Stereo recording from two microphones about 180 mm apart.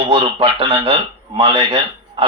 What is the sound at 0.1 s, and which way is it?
A man's voice, 30° right (ahead or behind).